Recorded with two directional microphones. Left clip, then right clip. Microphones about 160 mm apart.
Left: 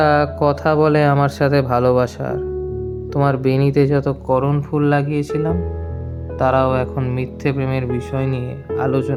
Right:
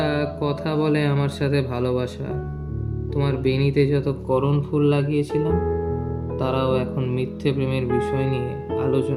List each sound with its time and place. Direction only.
0.0 s speech: 45° left (ahead or behind)